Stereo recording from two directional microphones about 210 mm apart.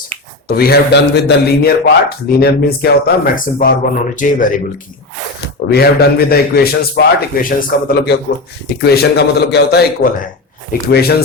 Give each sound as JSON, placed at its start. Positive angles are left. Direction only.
{"t": 0.4, "sound": "a man's voice", "side_deg": 45}
{"t": 5.6, "sound": "a man's voice", "side_deg": 50}